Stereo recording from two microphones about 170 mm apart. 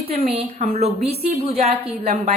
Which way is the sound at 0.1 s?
35° right (ahead or behind).